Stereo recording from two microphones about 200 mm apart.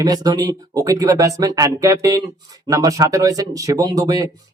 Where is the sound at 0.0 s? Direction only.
20° right (ahead or behind).